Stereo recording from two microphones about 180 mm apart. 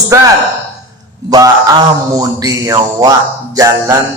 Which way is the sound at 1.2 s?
20° right (ahead or behind).